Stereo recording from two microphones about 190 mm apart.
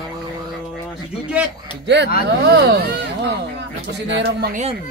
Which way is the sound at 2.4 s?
60° right (ahead or behind).